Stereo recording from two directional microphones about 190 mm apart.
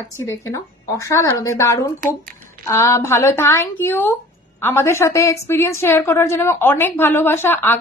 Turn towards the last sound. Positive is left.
turn(degrees=10)  # may be behind; listen again after turning